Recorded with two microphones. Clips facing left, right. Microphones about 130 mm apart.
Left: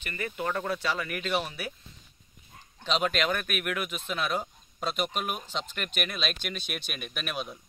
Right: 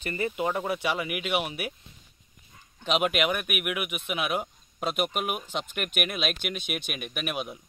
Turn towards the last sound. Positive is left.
turn(degrees=-10)  # may be behind; listen again after turning